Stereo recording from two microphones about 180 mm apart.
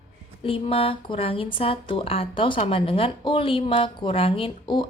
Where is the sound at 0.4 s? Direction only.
30° left (ahead or behind).